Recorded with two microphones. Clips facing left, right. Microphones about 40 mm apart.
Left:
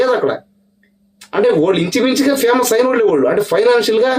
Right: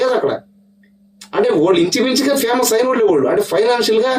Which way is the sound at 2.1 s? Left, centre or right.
Left.